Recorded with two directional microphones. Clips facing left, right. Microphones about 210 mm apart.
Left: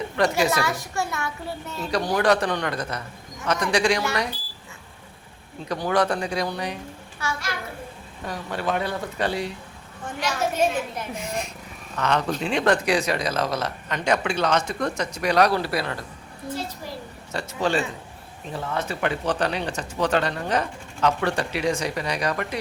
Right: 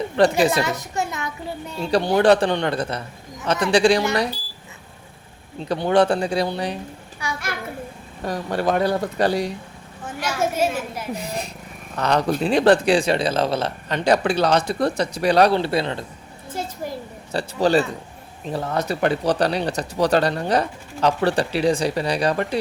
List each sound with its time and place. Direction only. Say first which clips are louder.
0.2 s speech: right 5 dB; 30° right (ahead or behind)
0.6 s a child's voice: right 2 dB; 20° right (ahead or behind)
1.8 s a child's voice: right 5 dB; 30° right (ahead or behind)
5.6 s a child's voice: right 5 dB; 30° right (ahead or behind)
7.2 s a child's voice: even; 15° right (ahead or behind)
8.2 s speech: right 6 dB; 40° right (ahead or behind)
10.1 s a woman's voice: right 2 dB; 5° right (ahead or behind)
11.1 s speech: right 2 dB; 35° right (ahead or behind)
16.8 s a sound: right 6 dB; 50° right (ahead or behind)
17.3 s speech: right 6 dB; 35° right (ahead or behind)